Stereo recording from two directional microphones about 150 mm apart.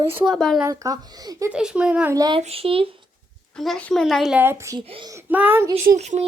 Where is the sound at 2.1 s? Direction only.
25° right (ahead or behind).